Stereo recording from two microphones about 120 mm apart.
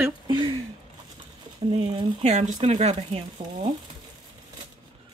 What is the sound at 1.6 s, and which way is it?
Speech, 45° right (ahead or behind).